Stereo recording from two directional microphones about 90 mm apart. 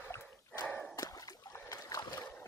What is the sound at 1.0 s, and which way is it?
Splash, 40° left (ahead or behind).